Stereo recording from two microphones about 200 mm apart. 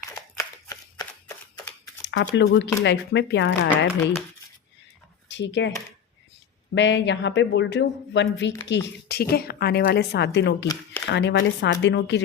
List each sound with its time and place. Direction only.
0.3 s shuffling cards: 15° left (ahead or behind)
2.0 s speech: 60° left (ahead or behind)
3.5 s speech: 10° left (ahead or behind)
5.3 s speech: 65° left (ahead or behind)
6.7 s a woman's voice: 60° left (ahead or behind)